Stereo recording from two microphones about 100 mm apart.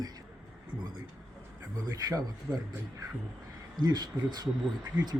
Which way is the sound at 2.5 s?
15° right (ahead or behind).